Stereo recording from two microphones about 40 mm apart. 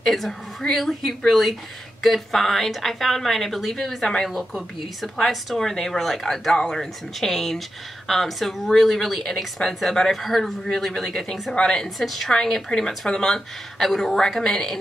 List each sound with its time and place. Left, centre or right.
0.0 s speech: centre
5.3 s speech: centre
11.5 s speech: centre